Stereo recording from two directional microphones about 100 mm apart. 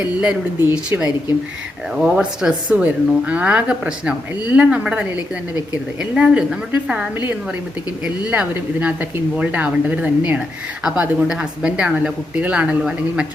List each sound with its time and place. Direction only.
0.2 s speech: 10° right (ahead or behind)